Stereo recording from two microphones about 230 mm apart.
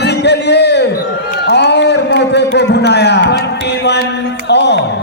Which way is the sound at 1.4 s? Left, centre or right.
Left.